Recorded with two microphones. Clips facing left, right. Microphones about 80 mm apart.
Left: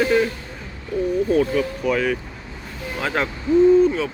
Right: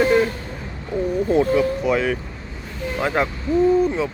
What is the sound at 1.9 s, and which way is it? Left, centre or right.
Speech, right.